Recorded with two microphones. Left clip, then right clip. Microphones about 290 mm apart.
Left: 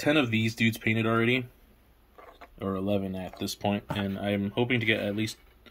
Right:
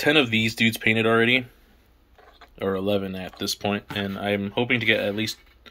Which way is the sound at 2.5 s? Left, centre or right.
Right.